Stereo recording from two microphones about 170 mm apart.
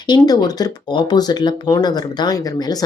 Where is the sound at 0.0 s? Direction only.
25° left (ahead or behind).